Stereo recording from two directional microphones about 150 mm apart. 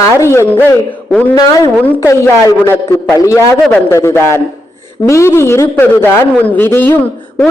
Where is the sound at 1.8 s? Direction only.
15° left (ahead or behind).